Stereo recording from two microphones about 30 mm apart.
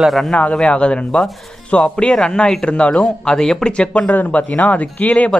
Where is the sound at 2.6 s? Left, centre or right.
Left.